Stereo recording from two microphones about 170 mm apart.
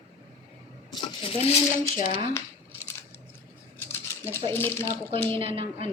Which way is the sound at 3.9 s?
15° left (ahead or behind).